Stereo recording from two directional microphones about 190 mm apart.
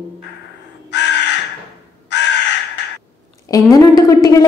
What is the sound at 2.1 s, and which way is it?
Crow, 65° left (ahead or behind).